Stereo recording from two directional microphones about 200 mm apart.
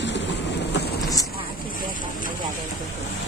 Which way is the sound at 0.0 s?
60° left (ahead or behind).